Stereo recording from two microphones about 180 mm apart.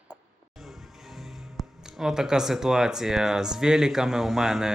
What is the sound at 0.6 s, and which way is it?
Speech, centre (ahead or behind).